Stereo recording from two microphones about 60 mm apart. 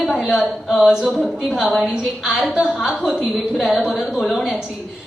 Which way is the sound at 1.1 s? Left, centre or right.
Centre.